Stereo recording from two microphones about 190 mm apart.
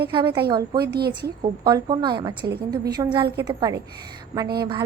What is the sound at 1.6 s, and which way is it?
A woman's voice, 20° right (ahead or behind).